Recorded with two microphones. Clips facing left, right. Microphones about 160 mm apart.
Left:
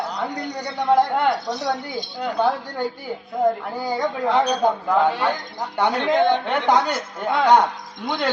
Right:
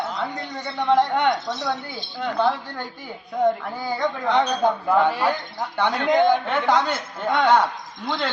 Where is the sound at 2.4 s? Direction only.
10° left (ahead or behind).